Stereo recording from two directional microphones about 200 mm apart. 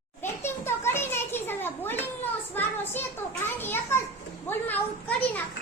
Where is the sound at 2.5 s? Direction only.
10° left (ahead or behind).